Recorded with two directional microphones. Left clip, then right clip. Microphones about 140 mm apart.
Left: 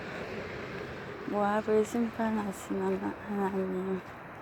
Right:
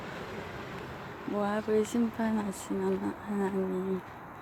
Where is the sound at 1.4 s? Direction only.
5° right (ahead or behind).